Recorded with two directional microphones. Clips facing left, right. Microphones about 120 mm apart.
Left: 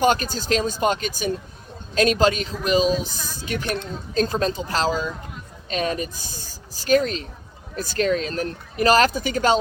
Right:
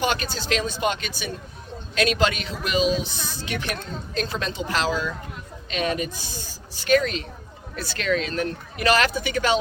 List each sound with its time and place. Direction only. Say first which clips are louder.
0.0 s speech: left 5 dB; 45° left (ahead or behind)